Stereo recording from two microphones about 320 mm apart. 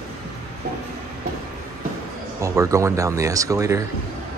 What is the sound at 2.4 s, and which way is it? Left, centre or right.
Speech, centre.